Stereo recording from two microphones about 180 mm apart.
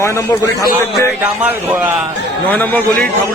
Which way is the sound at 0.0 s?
20° left (ahead or behind).